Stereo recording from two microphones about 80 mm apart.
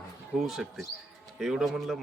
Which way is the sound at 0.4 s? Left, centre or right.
Centre.